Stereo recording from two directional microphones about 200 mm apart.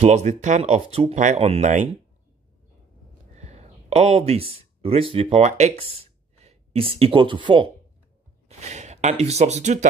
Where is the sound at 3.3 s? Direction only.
35° right (ahead or behind).